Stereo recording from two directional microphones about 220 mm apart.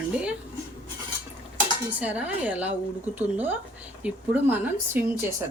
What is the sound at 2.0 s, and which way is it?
Speech, 5° right (ahead or behind).